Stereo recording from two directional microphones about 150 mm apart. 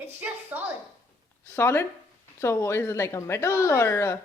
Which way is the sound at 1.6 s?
15° left (ahead or behind).